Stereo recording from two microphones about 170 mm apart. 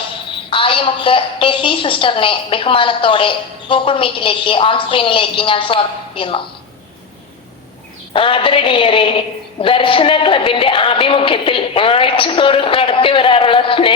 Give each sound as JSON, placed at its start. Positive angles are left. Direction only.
{"t": 0.5, "sound": "a woman's voice", "side_deg": 30}
{"t": 8.1, "sound": "a woman's voice", "side_deg": 30}